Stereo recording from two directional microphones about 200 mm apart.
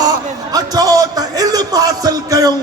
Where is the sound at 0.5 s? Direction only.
20° right (ahead or behind).